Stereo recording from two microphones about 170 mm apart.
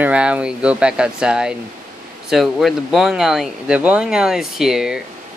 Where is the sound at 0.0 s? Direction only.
5° right (ahead or behind).